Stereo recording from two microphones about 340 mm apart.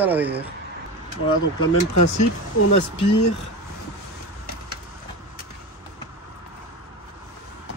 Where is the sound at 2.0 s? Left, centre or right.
Left.